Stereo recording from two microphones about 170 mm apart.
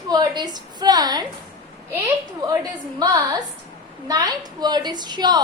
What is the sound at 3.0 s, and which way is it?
A woman's voice, 20° right (ahead or behind).